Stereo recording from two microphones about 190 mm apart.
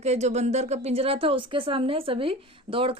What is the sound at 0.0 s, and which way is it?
A woman's voice, 35° right (ahead or behind).